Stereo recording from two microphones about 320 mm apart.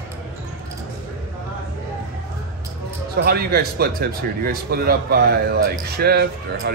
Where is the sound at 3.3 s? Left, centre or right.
Right.